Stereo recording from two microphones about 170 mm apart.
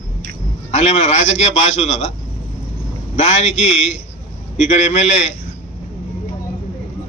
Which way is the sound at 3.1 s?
40° left (ahead or behind).